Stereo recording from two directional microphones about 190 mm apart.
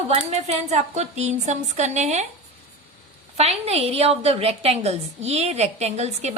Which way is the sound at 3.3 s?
35° right (ahead or behind).